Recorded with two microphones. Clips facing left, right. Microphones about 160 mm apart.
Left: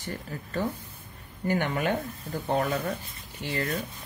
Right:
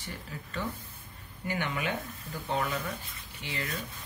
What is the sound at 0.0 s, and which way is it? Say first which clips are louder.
Speech: left 6 dB; 45° left (ahead or behind).